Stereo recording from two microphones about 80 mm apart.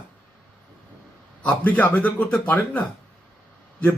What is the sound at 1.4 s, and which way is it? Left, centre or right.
Speech, left.